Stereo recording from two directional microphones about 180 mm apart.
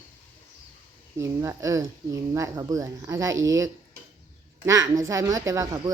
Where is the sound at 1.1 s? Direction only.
15° right (ahead or behind).